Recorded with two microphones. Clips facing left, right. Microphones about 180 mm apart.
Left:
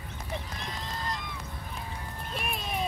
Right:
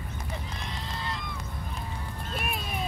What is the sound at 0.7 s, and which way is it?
Goose, 45° left (ahead or behind).